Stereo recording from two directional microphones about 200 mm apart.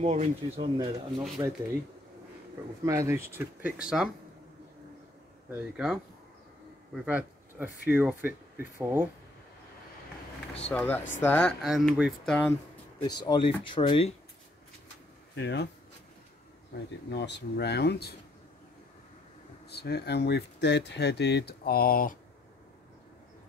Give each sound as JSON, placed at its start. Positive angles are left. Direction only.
{"t": 0.0, "sound": "speech", "side_deg": -30}
{"t": 1.4, "sound": "speech", "side_deg": -20}
{"t": 2.8, "sound": "speech", "side_deg": -15}
{"t": 5.5, "sound": "speech", "side_deg": -5}
{"t": 7.1, "sound": "speech", "side_deg": -10}
{"t": 10.7, "sound": "speech", "side_deg": 5}
{"t": 13.0, "sound": "speech", "side_deg": 20}
{"t": 15.3, "sound": "speech", "side_deg": 55}
{"t": 16.7, "sound": "speech", "side_deg": 60}
{"t": 19.7, "sound": "speech", "side_deg": 55}